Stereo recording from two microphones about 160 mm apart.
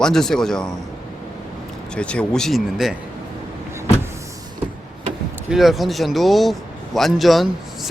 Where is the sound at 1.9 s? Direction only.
5° left (ahead or behind).